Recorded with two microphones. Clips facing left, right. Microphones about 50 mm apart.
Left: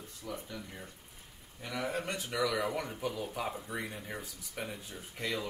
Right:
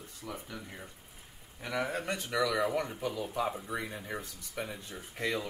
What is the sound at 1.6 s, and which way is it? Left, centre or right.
Speech, centre.